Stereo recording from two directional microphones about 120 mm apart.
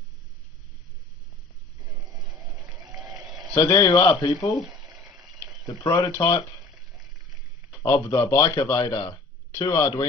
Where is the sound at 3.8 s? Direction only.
25° left (ahead or behind).